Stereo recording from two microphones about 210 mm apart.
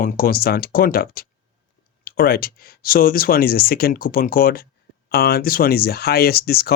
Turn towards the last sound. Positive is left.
turn(degrees=45)  # may be behind; listen again after turning